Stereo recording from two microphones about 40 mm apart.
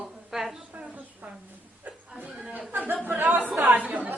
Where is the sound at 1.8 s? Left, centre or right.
Right.